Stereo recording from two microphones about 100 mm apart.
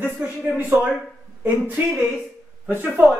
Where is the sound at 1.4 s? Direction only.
15° right (ahead or behind).